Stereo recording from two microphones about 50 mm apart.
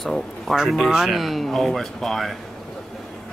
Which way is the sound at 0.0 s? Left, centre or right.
Centre.